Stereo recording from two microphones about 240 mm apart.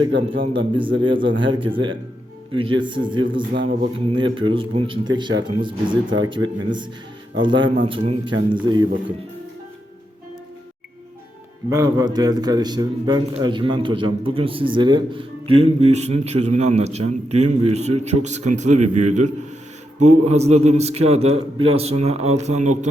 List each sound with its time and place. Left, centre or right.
0.1 s a man's voice: right
0.9 s a man's voice: right
3.5 s a man's voice: right
3.9 s a man's voice: right
11.7 s a man's voice: centre